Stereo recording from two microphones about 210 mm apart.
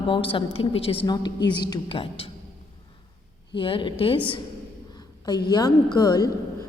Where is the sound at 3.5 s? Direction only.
25° left (ahead or behind).